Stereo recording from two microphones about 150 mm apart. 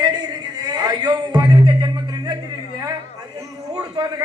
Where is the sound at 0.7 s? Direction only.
25° right (ahead or behind).